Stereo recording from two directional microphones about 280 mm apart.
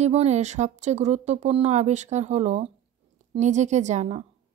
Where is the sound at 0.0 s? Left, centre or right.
Right.